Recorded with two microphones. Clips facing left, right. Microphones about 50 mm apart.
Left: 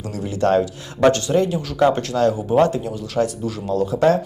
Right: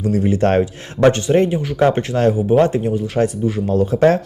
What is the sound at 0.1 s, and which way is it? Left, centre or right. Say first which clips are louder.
Speech: right 2 dB; right.